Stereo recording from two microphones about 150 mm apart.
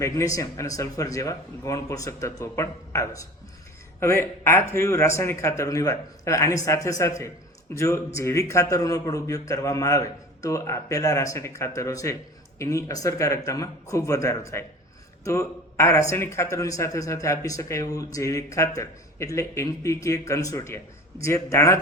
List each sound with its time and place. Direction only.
0.0 s a man's voice: 20° left (ahead or behind)